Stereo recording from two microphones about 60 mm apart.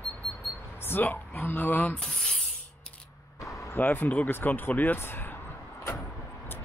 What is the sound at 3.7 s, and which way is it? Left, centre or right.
Speech, left.